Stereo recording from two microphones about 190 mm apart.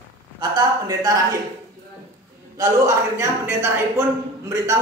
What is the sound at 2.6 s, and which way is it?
A man's voice, 15° right (ahead or behind).